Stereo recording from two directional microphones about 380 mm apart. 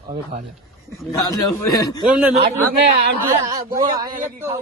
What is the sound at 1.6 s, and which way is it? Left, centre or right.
Speech, centre.